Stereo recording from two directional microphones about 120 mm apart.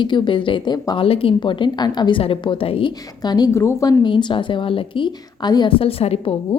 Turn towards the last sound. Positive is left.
turn(degrees=55)  # may be behind; listen again after turning